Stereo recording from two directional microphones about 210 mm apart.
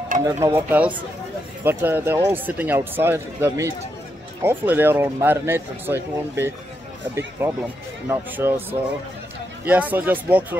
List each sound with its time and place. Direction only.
0.2 s speech: 10° right (ahead or behind)
9.7 s speech: 10° right (ahead or behind)